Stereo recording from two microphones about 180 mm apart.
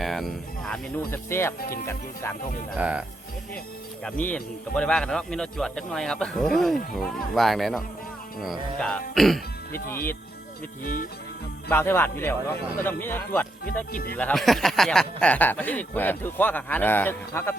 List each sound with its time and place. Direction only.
0.0 s a man's voice: centre (ahead or behind)
2.7 s speech: 5° right (ahead or behind)
4.0 s a man's voice: 5° left (ahead or behind)
10.8 s speech: 50° left (ahead or behind)
11.7 s speech: 10° left (ahead or behind)